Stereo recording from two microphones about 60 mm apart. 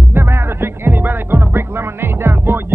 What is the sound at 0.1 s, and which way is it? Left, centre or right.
Music, right.